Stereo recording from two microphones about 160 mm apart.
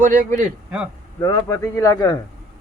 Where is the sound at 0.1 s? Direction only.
15° left (ahead or behind).